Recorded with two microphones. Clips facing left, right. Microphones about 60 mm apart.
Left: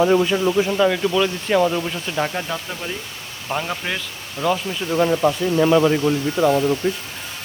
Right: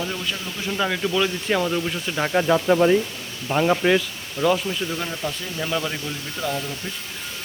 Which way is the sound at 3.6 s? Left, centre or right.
Centre.